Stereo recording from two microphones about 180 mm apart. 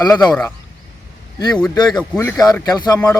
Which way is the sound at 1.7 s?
20° left (ahead or behind).